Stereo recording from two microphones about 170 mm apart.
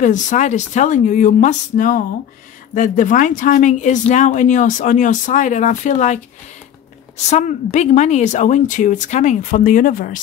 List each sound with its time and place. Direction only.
0.0 s a woman's voice: 45° left (ahead or behind)
7.2 s a woman's voice: 45° left (ahead or behind)